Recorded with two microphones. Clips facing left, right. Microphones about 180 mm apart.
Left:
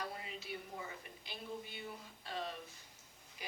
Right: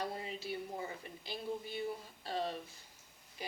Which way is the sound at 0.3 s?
35° right (ahead or behind).